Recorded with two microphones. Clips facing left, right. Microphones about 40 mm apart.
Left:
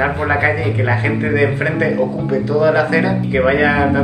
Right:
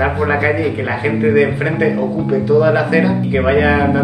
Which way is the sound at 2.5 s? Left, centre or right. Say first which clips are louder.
Right 1 dB; right.